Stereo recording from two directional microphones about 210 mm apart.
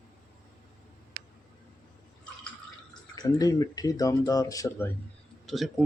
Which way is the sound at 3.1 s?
20° left (ahead or behind).